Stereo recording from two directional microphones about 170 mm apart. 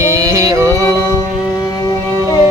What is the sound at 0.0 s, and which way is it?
Music, 20° right (ahead or behind).